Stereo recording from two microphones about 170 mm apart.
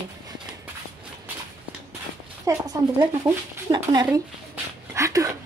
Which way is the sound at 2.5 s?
20° right (ahead or behind).